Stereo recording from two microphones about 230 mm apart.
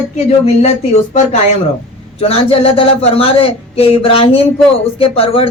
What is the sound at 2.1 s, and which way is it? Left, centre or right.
Speech, left.